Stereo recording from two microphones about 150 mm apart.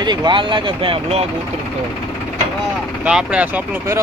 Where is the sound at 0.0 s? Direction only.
30° right (ahead or behind).